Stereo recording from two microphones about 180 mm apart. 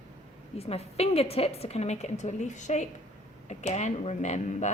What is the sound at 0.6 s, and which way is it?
Speech, 35° left (ahead or behind).